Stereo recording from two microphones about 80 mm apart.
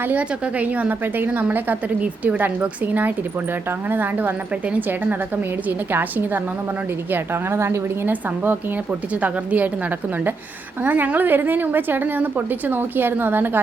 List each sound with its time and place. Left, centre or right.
0.0 s a woman's voice: centre
8.1 s a woman's voice: centre
10.8 s a woman's voice: right